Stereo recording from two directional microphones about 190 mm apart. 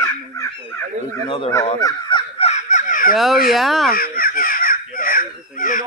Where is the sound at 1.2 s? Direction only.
30° left (ahead or behind).